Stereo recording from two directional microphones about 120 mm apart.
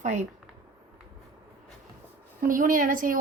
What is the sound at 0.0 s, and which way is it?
Speech, 90° right.